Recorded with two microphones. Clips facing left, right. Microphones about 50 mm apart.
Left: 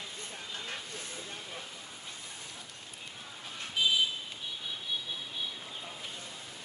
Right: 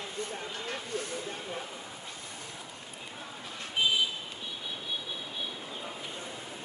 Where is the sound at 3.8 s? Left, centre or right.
Right.